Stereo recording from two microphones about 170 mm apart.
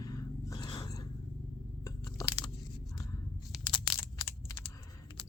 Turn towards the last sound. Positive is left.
turn(degrees=25)  # may be behind; listen again after turning